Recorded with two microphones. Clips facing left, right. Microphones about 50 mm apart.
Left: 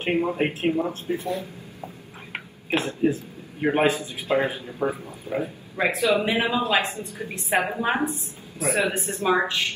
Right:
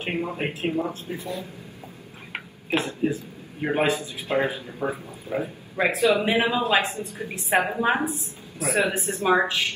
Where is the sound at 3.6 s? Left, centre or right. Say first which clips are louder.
Left 2 dB; centre.